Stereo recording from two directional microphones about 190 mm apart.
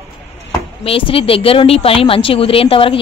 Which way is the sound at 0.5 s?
25° left (ahead or behind).